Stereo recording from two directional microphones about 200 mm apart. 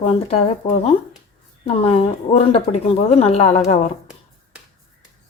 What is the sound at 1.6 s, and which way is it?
Speech, 30° left (ahead or behind).